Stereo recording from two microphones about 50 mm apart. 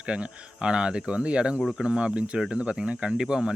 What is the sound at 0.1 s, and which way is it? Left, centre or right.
Speech, centre.